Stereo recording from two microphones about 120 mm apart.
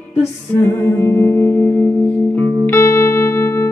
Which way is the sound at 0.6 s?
20° left (ahead or behind).